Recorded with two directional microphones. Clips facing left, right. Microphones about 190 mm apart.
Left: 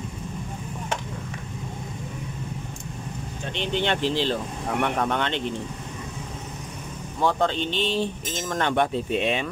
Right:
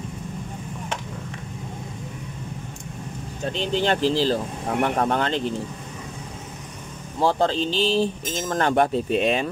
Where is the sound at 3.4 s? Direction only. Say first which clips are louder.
Right 3 dB; 35° right (ahead or behind).